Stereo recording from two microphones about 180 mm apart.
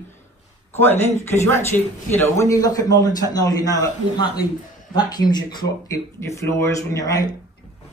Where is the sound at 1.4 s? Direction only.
15° left (ahead or behind).